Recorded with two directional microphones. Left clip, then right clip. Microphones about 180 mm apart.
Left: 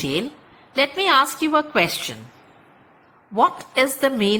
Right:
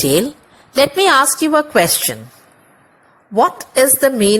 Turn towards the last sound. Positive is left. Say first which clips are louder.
# right 7 dB
turn(degrees=-25)  # may be behind; listen again after turning